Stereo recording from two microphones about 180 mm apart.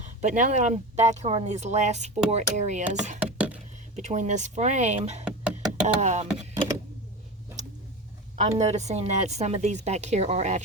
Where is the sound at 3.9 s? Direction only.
40° right (ahead or behind).